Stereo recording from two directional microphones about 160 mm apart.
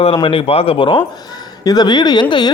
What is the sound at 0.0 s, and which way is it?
Speech, 35° left (ahead or behind).